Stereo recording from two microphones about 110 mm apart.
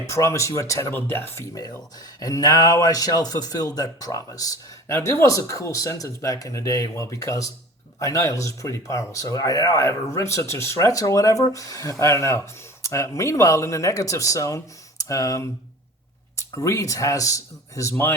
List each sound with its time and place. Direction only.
0.0 s speech: 25° left (ahead or behind)
2.2 s speech: 35° left (ahead or behind)